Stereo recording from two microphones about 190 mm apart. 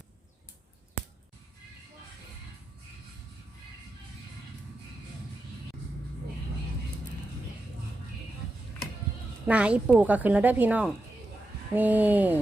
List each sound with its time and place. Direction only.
9.5 s a woman's voice: 5° right (ahead or behind)